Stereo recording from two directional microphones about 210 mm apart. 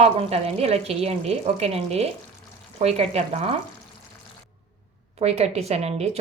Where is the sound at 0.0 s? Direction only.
30° right (ahead or behind).